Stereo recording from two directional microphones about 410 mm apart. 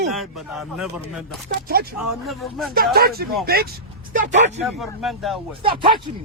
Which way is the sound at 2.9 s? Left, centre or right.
Right.